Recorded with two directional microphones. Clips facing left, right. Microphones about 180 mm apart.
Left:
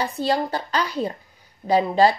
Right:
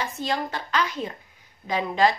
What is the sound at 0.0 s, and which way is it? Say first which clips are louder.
A woman's voice: left 5 dB; 35° left (ahead or behind).